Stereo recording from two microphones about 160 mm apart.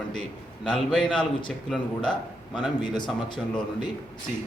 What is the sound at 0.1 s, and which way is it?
A man's voice, 5° left (ahead or behind).